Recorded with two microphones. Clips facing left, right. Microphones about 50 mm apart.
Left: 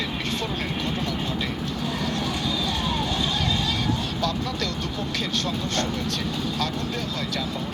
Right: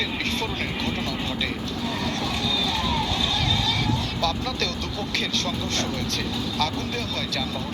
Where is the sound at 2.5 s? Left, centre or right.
Right.